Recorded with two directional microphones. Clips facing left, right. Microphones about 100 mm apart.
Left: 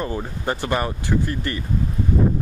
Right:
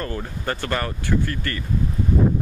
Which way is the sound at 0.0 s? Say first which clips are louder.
Left 2 dB; 15° left (ahead or behind).